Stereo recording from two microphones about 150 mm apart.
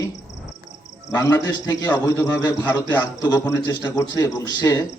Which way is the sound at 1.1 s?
20° left (ahead or behind).